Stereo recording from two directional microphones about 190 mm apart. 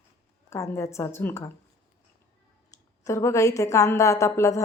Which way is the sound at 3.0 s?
15° left (ahead or behind).